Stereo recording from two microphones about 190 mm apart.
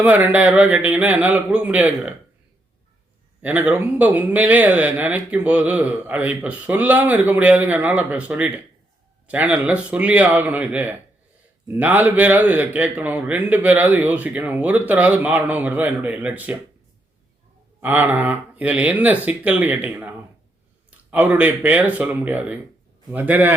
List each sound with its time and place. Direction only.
0.0 s speech: 10° right (ahead or behind)
3.4 s speech: 10° right (ahead or behind)
17.7 s speech: 10° right (ahead or behind)
21.1 s speech: 10° right (ahead or behind)